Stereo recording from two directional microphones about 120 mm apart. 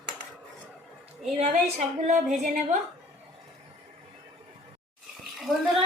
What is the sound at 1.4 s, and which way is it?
A woman's voice, 65° right (ahead or behind).